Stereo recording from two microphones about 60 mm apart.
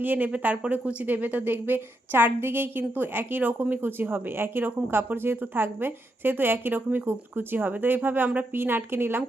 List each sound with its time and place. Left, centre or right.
0.0 s speech: right